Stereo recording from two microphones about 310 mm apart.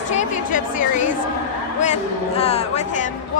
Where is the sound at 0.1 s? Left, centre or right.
Left.